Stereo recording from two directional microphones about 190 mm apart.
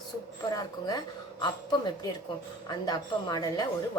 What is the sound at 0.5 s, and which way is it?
Speech, 20° left (ahead or behind).